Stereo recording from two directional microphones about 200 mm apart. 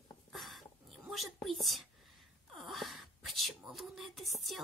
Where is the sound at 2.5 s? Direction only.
Centre (ahead or behind).